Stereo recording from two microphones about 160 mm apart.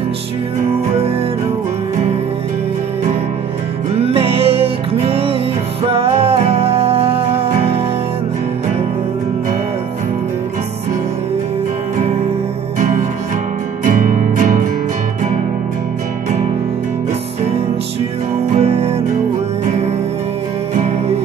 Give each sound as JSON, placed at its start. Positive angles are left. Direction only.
{"t": 3.9, "sound": "music", "side_deg": -40}
{"t": 13.8, "sound": "music", "side_deg": -55}
{"t": 18.5, "sound": "music", "side_deg": -40}